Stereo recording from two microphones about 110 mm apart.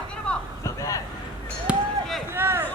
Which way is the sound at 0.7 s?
30° left (ahead or behind).